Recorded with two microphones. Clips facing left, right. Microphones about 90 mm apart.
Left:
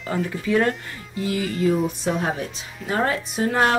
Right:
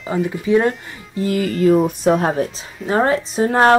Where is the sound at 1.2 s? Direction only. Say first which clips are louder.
Right 6 dB; 45° right (ahead or behind).